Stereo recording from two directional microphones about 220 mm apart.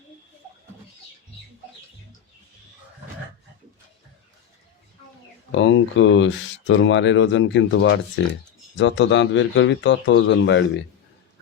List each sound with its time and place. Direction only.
5.5 s speech: 55° left (ahead or behind)